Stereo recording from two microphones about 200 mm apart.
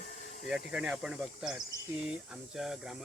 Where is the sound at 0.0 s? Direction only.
45° left (ahead or behind).